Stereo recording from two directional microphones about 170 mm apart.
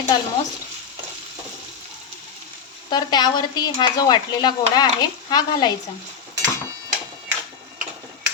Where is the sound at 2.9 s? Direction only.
25° left (ahead or behind).